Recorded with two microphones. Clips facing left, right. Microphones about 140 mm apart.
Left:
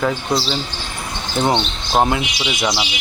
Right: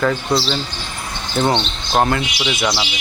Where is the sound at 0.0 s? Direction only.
10° left (ahead or behind).